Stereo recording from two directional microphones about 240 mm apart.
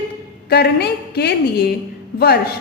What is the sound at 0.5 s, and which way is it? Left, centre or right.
A woman's voice, left.